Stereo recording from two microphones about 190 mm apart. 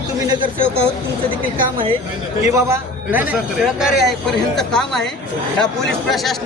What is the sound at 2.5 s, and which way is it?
Speech, 15° right (ahead or behind).